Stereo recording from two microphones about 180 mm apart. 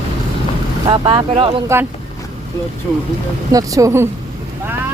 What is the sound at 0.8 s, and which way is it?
Speech, 25° right (ahead or behind).